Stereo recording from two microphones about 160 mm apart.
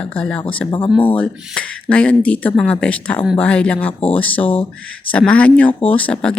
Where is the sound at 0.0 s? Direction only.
5° left (ahead or behind).